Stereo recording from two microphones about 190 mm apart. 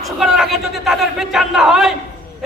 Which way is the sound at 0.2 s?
Centre (ahead or behind).